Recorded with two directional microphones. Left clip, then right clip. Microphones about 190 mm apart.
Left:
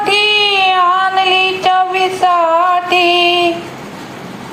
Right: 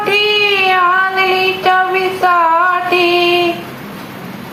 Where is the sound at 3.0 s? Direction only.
25° left (ahead or behind).